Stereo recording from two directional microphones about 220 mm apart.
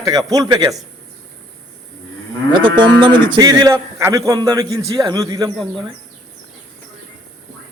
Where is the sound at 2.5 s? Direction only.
20° right (ahead or behind).